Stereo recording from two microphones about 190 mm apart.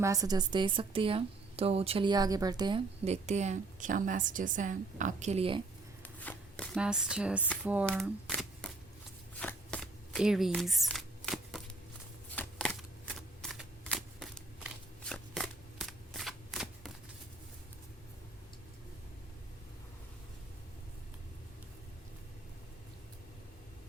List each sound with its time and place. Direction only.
0.0 s a woman's voice: 15° right (ahead or behind)
6.0 s shuffling cards: 10° left (ahead or behind)
6.7 s speech: 5° right (ahead or behind)
7.9 s shuffling cards: 5° left (ahead or behind)